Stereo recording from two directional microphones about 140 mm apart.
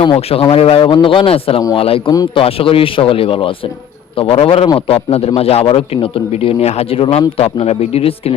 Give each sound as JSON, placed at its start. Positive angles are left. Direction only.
{"t": 0.0, "sound": "a man's voice", "side_deg": 40}